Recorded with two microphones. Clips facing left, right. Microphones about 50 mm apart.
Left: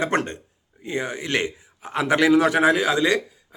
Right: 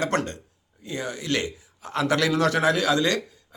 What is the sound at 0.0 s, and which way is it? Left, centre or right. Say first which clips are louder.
A man's voice: left 2 dB; left.